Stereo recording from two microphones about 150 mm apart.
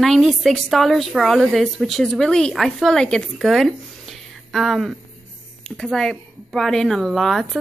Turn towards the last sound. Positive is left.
turn(degrees=0)  # may be behind; listen again after turning